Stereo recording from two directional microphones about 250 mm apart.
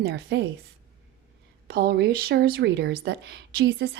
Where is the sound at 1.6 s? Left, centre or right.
Right.